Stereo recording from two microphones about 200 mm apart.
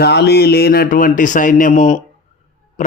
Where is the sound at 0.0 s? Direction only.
55° left (ahead or behind).